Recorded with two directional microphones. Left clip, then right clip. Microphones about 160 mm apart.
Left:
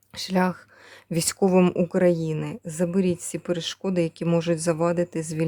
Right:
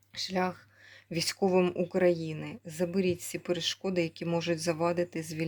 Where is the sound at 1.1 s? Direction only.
55° left (ahead or behind).